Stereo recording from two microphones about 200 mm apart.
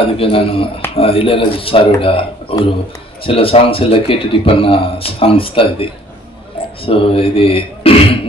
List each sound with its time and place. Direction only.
0.2 s a man's voice: 25° left (ahead or behind)
6.9 s speech: 30° left (ahead or behind)